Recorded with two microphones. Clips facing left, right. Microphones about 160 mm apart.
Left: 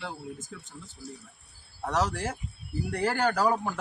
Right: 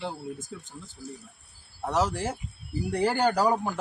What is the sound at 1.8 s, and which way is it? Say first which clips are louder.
Speech: right 2 dB; 10° right (ahead or behind).